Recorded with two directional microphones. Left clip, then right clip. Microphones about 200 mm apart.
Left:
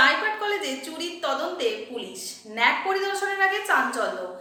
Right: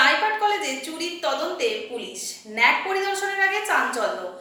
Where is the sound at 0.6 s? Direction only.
20° left (ahead or behind).